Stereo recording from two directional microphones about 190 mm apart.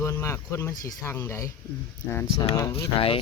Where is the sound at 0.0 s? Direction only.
15° left (ahead or behind).